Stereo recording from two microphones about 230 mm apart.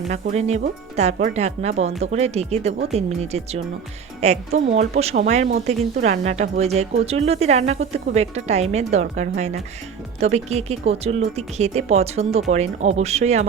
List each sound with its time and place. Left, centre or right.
0.1 s speech: right